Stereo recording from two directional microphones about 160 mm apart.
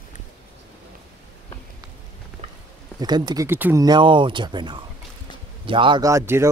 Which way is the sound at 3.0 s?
25° right (ahead or behind).